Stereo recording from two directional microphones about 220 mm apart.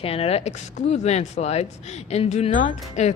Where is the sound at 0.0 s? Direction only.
25° left (ahead or behind).